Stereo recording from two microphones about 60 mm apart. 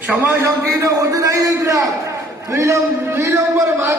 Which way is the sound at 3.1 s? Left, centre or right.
Right.